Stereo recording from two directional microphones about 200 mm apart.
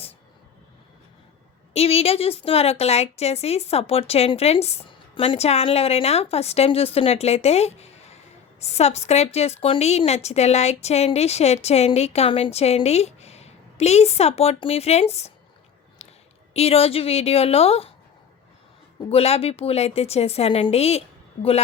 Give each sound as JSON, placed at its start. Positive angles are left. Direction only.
{"t": 1.7, "sound": "a woman's voice", "side_deg": 30}
{"t": 16.0, "sound": "a sound", "side_deg": 30}
{"t": 16.6, "sound": "a woman's voice", "side_deg": 30}
{"t": 18.9, "sound": "a woman's voice", "side_deg": 30}